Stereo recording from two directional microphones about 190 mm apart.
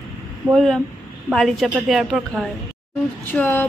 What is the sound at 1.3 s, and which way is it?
Speech, centre (ahead or behind).